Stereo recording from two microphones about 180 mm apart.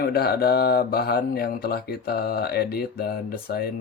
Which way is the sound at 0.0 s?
60° left (ahead or behind).